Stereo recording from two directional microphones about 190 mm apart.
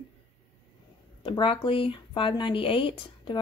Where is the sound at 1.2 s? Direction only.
25° left (ahead or behind).